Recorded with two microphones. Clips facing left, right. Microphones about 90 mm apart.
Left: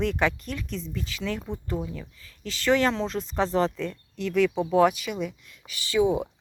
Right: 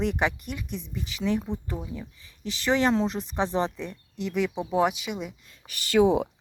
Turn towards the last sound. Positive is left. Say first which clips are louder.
# right 2 dB
turn(degrees=-80)